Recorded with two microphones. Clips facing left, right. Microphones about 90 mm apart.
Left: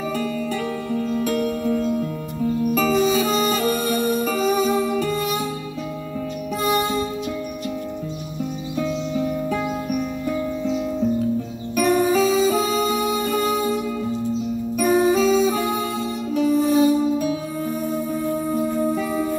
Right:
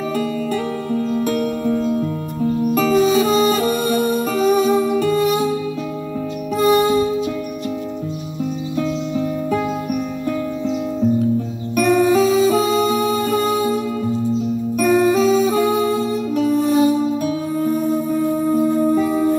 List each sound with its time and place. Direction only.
0.9 s music: 15° right (ahead or behind)
2.7 s music: 5° right (ahead or behind)
6.7 s music: 5° right (ahead or behind)
8.7 s music: centre (ahead or behind)
11.7 s music: centre (ahead or behind)
14.8 s music: centre (ahead or behind)